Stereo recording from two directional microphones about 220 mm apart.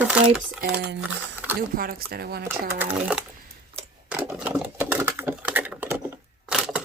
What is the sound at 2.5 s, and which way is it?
Speech, 10° right (ahead or behind).